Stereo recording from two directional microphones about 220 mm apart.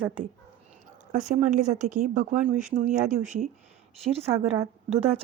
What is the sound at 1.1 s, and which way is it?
Speech, 35° right (ahead or behind).